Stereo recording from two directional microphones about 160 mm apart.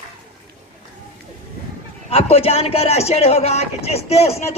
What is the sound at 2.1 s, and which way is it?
A man's voice, 40° left (ahead or behind).